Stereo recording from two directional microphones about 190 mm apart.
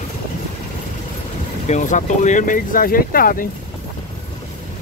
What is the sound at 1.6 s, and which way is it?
Speech, 40° left (ahead or behind).